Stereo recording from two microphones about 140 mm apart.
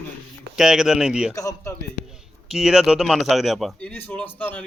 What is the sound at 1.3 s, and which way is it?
Speech, 25° left (ahead or behind).